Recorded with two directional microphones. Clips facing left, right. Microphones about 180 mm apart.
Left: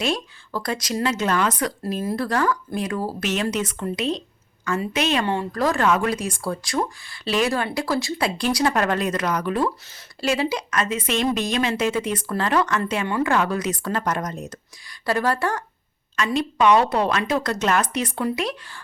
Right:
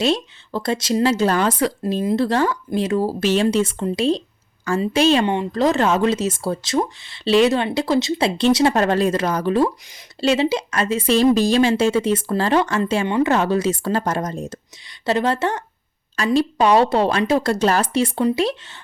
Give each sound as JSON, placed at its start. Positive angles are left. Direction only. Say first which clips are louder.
{"t": 0.0, "sound": "a woman's voice", "louder": "right 5 dB", "side_deg": -25}
{"t": 16.1, "sound": "a woman's voice", "louder": "right 4 dB", "side_deg": -35}